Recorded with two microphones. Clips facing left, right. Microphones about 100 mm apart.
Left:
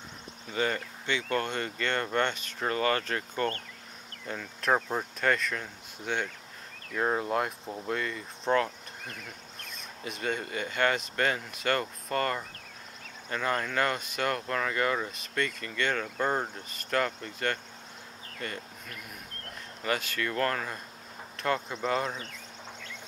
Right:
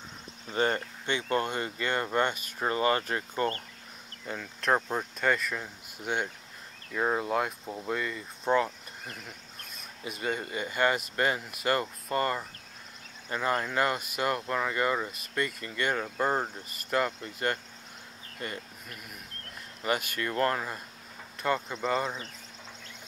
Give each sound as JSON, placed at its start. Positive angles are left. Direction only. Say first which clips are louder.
{"t": 0.5, "sound": "speech", "louder": "right 2 dB", "side_deg": -35}
{"t": 1.0, "sound": "speech", "louder": "right 1 dB", "side_deg": -20}
{"t": 4.3, "sound": "speech", "louder": "even", "side_deg": 0}
{"t": 6.9, "sound": "speech", "louder": "even", "side_deg": 0}
{"t": 10.0, "sound": "speech", "louder": "even", "side_deg": -5}
{"t": 19.8, "sound": "speech", "louder": "right 1 dB", "side_deg": -15}
{"t": 21.4, "sound": "speech", "louder": "even", "side_deg": 0}